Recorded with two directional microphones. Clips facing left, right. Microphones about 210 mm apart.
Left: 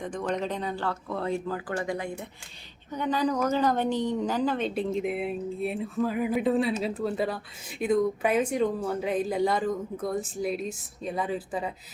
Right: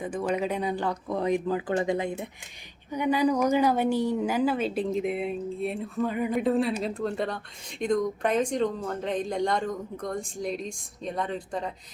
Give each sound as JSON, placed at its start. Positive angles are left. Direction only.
{"t": 0.0, "sound": "a woman's voice", "side_deg": -5}